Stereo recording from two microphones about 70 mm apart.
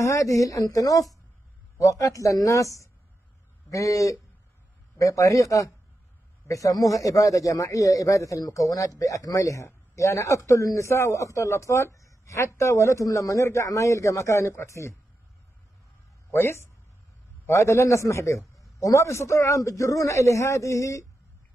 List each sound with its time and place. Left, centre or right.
0.0 s a man's voice: left
16.3 s a man's voice: left